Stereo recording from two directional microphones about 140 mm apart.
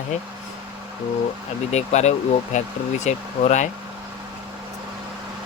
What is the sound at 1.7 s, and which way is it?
Speech, 55° left (ahead or behind).